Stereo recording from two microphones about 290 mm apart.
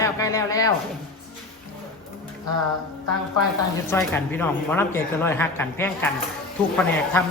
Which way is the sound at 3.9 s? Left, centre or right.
Centre.